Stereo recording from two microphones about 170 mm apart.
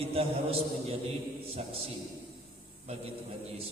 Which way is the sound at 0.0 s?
35° right (ahead or behind).